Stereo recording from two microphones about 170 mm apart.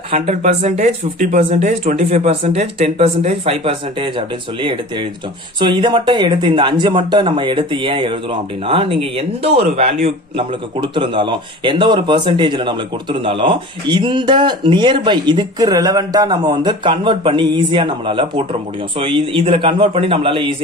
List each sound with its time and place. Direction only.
0.1 s speech: 45° right (ahead or behind)